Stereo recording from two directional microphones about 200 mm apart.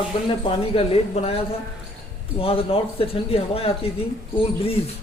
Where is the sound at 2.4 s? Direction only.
30° left (ahead or behind).